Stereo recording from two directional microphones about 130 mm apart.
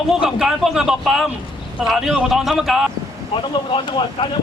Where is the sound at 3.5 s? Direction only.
35° left (ahead or behind).